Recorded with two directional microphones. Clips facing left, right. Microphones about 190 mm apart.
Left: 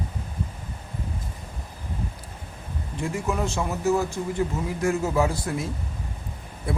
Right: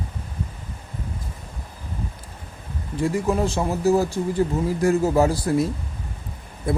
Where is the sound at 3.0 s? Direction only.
35° right (ahead or behind).